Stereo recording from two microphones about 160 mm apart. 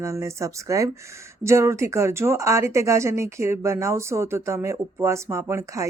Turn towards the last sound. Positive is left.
turn(degrees=-20)  # may be behind; listen again after turning